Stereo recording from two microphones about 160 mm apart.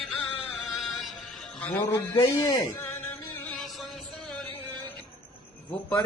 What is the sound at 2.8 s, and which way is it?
Music, 10° left (ahead or behind).